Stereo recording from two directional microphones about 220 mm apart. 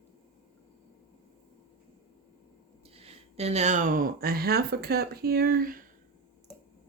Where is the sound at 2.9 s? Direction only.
30° right (ahead or behind).